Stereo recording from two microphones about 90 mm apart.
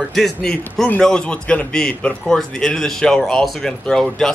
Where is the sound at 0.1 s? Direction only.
5° left (ahead or behind).